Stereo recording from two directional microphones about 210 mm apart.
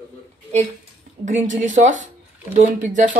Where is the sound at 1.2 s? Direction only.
35° right (ahead or behind).